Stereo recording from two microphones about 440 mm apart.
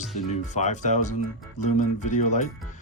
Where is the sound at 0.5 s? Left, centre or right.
Centre.